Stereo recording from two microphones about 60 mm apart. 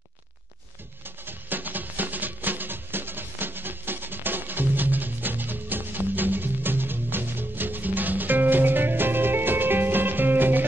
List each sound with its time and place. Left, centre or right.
1.0 s music: right